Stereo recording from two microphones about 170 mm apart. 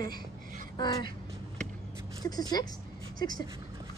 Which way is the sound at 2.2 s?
25° left (ahead or behind).